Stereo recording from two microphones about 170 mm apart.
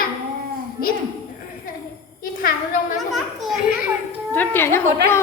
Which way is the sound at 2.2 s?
55° left (ahead or behind).